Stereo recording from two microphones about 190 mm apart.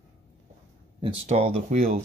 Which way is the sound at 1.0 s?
35° right (ahead or behind).